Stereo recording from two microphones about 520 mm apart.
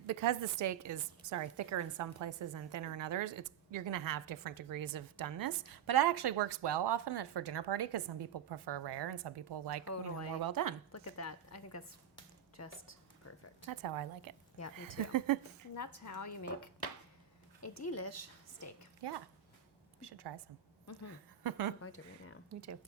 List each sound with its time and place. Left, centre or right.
0.1 s a woman's voice: right
9.8 s a woman's voice: left
10.4 s a woman's voice: right
10.9 s a woman's voice: left
13.7 s a woman's voice: right
15.7 s a woman's voice: left
17.6 s a woman's voice: left
19.0 s a woman's voice: right
21.4 s a woman's voice: right
21.8 s a woman's voice: left